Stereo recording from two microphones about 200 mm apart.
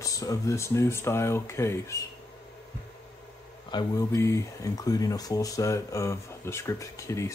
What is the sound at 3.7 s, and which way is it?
Speech, 15° left (ahead or behind).